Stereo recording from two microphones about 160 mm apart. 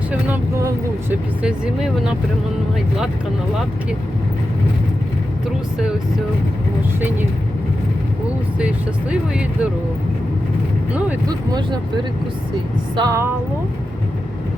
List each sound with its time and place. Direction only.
0.1 s speech: 10° right (ahead or behind)
8.5 s speech: 5° right (ahead or behind)
13.0 s a sound: 20° right (ahead or behind)